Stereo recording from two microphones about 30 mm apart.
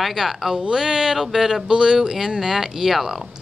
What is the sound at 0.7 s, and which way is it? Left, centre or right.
Speech, right.